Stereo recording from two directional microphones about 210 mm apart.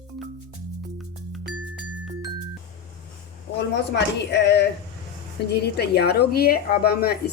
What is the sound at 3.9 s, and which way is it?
A woman's voice, 55° left (ahead or behind).